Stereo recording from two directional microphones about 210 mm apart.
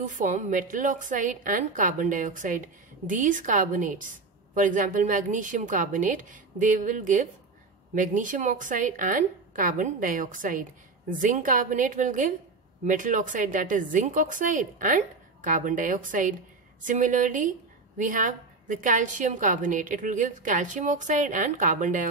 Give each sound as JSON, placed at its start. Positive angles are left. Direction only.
{"t": 0.0, "sound": "a woman's voice", "side_deg": -35}